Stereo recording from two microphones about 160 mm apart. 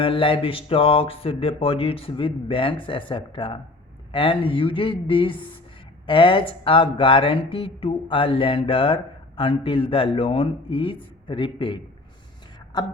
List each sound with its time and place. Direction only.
0.0 s speech: 35° left (ahead or behind)